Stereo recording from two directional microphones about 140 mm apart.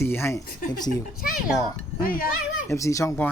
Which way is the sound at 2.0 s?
90° left.